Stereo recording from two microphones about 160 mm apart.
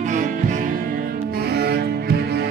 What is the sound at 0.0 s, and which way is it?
Music, 50° right (ahead or behind).